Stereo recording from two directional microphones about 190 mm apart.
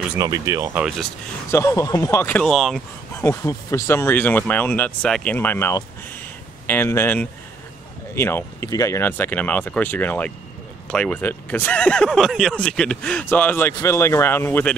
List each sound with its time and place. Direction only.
0.2 s speech: 15° right (ahead or behind)
1.5 s speech: 15° left (ahead or behind)
3.2 s speech: 15° left (ahead or behind)